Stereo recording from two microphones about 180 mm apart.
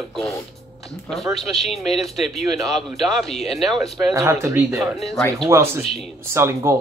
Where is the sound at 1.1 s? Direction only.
Centre (ahead or behind).